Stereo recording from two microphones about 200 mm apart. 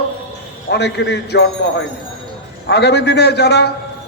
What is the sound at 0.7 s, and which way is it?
Speech, 60° left (ahead or behind).